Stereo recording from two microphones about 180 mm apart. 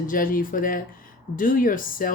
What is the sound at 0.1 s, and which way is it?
Speech, 50° left (ahead or behind).